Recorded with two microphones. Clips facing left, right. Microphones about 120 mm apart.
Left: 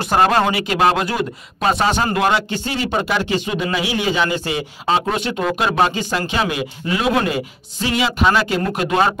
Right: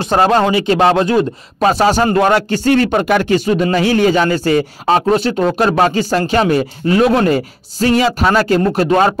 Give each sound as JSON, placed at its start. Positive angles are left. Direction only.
{"t": 0.2, "sound": "speech", "side_deg": -25}
{"t": 2.6, "sound": "a man's voice", "side_deg": -55}
{"t": 3.4, "sound": "a man's voice", "side_deg": -45}
{"t": 5.1, "sound": "speech", "side_deg": -35}